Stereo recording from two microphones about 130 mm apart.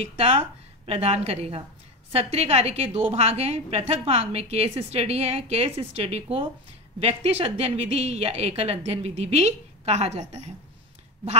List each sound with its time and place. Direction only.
0.2 s a woman's voice: 50° right (ahead or behind)